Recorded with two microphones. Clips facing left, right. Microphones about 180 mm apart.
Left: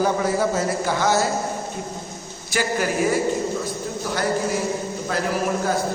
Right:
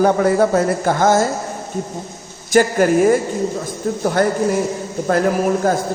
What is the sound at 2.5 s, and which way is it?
Speech, 50° right (ahead or behind).